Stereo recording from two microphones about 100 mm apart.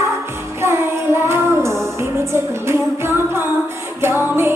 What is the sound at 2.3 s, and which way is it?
Music, 25° right (ahead or behind).